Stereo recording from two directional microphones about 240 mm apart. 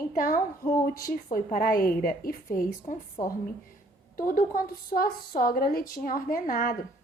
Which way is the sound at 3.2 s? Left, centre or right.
Left.